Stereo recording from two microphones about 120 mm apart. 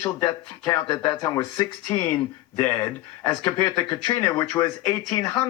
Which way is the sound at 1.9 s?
15° left (ahead or behind).